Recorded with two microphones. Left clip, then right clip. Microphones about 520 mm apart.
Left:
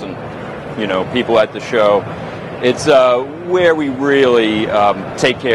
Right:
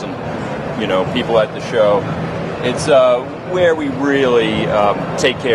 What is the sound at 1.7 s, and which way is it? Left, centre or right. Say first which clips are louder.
Speech: left 1 dB; left.